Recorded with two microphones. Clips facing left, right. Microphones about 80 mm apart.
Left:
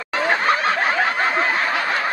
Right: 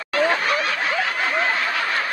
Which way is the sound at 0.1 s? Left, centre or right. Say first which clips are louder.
Left 1 dB; left.